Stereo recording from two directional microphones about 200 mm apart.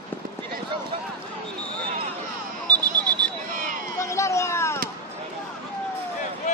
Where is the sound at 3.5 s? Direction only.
40° right (ahead or behind).